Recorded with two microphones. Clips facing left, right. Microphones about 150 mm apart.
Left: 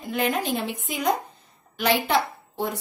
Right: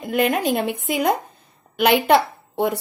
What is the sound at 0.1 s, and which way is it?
A woman's voice, 60° right (ahead or behind).